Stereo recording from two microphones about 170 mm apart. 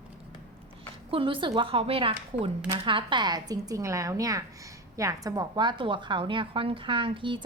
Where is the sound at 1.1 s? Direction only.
30° right (ahead or behind).